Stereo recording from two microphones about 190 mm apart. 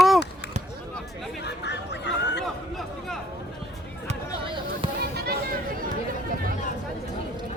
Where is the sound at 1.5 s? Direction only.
65° left (ahead or behind).